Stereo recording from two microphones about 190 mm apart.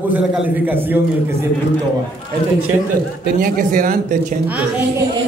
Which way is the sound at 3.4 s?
45° right (ahead or behind).